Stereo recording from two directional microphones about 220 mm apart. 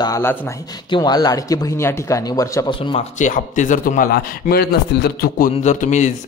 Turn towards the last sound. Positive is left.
turn(degrees=35)  # may be behind; listen again after turning